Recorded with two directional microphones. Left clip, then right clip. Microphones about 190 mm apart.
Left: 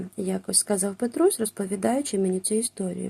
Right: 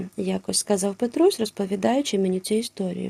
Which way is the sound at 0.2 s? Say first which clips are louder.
Right 1 dB; 25° right (ahead or behind).